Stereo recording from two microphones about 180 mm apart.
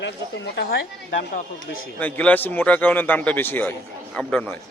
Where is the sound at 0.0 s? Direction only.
75° left (ahead or behind).